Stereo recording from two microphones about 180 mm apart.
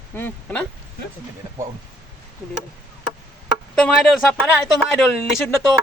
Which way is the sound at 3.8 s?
5° left (ahead or behind).